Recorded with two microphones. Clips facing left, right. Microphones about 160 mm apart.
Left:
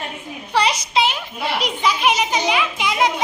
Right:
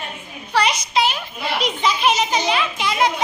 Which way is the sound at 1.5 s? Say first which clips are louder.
Right 1 dB; 10° left (ahead or behind).